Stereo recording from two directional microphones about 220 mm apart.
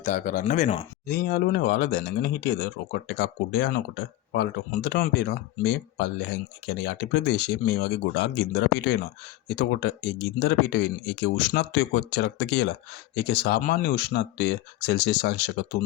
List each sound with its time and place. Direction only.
0.0 s speech: 35° left (ahead or behind)
1.0 s speech: 45° left (ahead or behind)